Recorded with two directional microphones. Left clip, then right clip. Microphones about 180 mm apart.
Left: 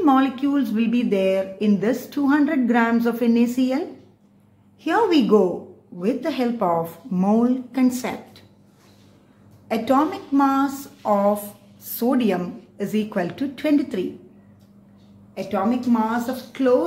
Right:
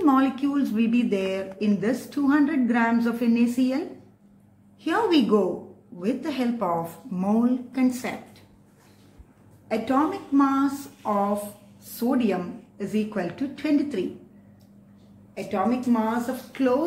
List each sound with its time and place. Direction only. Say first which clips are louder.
0.0 s speech: left 3 dB; 35° left (ahead or behind)
4.8 s a woman's voice: left 3 dB; 40° left (ahead or behind)
9.7 s a woman's voice: left 4 dB; 60° left (ahead or behind)
11.0 s a sound: left 5 dB; 50° left (ahead or behind)
12.0 s a woman's voice: left 4 dB; 50° left (ahead or behind)
15.9 s a woman's voice: left 3 dB; 55° left (ahead or behind)